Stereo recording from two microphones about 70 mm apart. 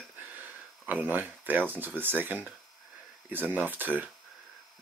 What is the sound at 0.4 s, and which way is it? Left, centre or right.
Speech, right.